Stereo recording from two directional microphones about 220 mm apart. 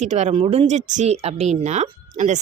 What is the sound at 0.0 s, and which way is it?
Speech, 30° right (ahead or behind).